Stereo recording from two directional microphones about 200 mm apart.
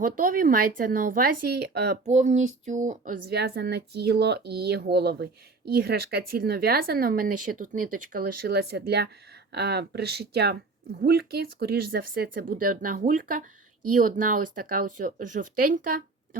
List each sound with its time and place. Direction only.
0.0 s speech: 45° right (ahead or behind)
2.0 s speech: 35° right (ahead or behind)